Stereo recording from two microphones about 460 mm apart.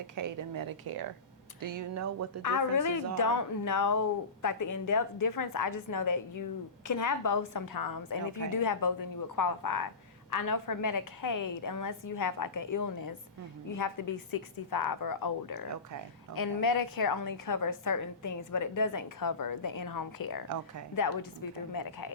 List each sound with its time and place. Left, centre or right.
0.2 s speech: right
1.6 s speech: right
2.4 s a woman's voice: left
21.7 s a woman's voice: left